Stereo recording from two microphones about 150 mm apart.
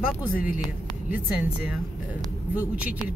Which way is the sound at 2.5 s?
10° right (ahead or behind).